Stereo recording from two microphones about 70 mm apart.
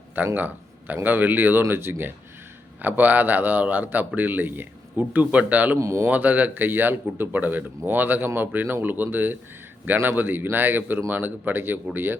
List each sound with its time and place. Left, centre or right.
0.3 s a man's voice: right
5.8 s speech: right
6.1 s speech: right